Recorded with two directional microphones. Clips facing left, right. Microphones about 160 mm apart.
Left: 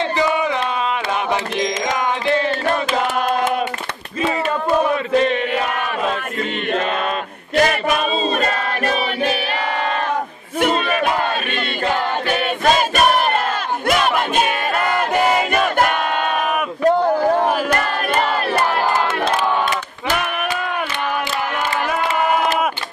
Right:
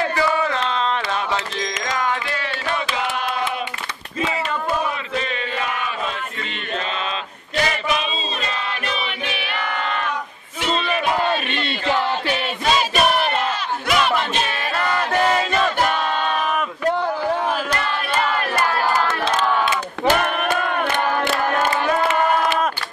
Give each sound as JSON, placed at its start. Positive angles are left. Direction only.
{"t": 0.2, "sound": "a sound", "side_deg": 15}
{"t": 1.6, "sound": "music", "side_deg": 20}
{"t": 2.6, "sound": "chant", "side_deg": 45}
{"t": 5.2, "sound": "chant", "side_deg": 45}
{"t": 7.5, "sound": "a sound", "side_deg": 50}
{"t": 10.6, "sound": "battle cry", "side_deg": 50}
{"t": 15.1, "sound": "battle cry", "side_deg": 10}
{"t": 16.8, "sound": "battle cry", "side_deg": 40}